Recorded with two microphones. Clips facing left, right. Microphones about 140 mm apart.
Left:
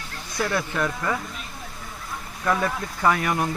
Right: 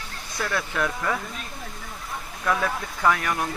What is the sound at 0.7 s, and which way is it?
Speech, centre (ahead or behind).